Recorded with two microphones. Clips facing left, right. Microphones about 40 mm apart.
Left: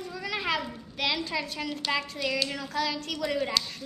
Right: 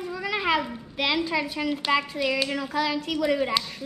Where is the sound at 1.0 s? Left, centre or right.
Centre.